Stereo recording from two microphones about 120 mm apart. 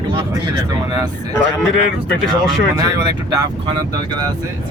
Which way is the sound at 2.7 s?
30° right (ahead or behind).